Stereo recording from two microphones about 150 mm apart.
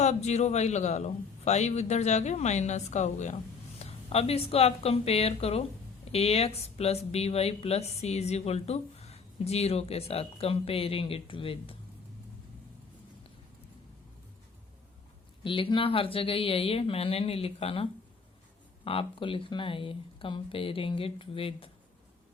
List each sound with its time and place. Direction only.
0.0 s a woman's voice: 50° left (ahead or behind)
15.4 s speech: 35° left (ahead or behind)
18.9 s speech: 35° left (ahead or behind)